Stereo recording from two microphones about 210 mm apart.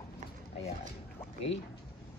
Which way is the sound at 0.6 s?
30° left (ahead or behind).